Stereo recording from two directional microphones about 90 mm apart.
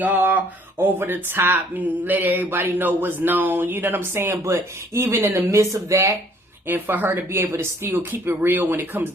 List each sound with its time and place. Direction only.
0.0 s speech: 20° right (ahead or behind)
6.7 s speech: 20° right (ahead or behind)